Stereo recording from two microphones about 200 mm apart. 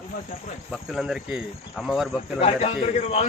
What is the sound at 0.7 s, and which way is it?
A man's voice, centre (ahead or behind).